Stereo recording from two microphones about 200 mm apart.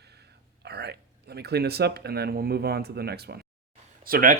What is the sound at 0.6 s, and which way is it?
Speech, 55° right (ahead or behind).